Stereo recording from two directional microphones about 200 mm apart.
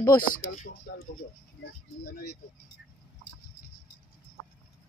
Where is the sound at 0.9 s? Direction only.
55° left (ahead or behind).